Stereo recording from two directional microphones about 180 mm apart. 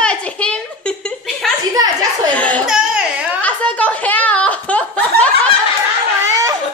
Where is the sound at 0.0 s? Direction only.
5° left (ahead or behind).